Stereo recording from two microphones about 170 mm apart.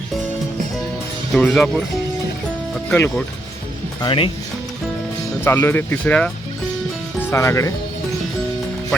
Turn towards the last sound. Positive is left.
turn(degrees=15)  # may be behind; listen again after turning